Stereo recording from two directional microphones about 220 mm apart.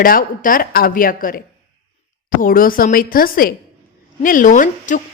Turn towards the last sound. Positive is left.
turn(degrees=35)  # may be behind; listen again after turning